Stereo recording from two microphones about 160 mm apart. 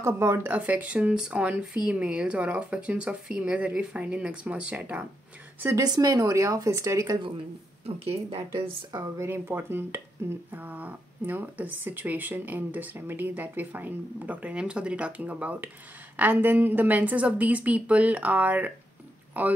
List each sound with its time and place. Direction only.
0.0 s speech: 15° right (ahead or behind)
5.6 s speech: 20° right (ahead or behind)
7.8 s speech: 35° right (ahead or behind)
8.9 s speech: 20° right (ahead or behind)